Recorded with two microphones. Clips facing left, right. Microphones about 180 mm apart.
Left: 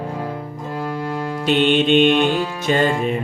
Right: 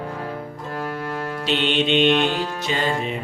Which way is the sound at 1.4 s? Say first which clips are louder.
Left 6 dB; 50° left (ahead or behind).